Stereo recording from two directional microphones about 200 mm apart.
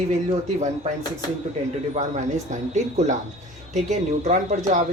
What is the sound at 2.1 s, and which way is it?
Speech, 35° right (ahead or behind).